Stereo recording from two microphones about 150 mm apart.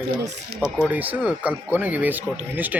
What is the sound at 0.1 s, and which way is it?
Speech, 35° right (ahead or behind).